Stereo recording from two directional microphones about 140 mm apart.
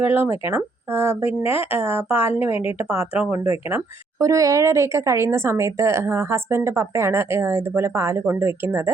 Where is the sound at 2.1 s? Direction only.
45° left (ahead or behind).